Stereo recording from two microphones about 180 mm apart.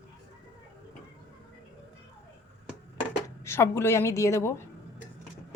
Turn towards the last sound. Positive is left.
turn(degrees=15)  # may be behind; listen again after turning